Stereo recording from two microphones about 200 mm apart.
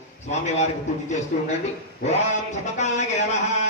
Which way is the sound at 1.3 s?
40° left (ahead or behind).